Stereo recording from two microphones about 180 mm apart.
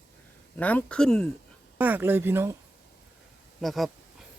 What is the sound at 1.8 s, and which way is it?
Speech, 10° right (ahead or behind).